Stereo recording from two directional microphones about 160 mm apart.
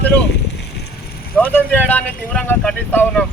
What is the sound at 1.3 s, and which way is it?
Speech, 10° left (ahead or behind).